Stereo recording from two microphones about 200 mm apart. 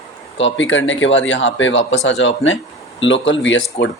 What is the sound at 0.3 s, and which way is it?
Speech, 65° left (ahead or behind).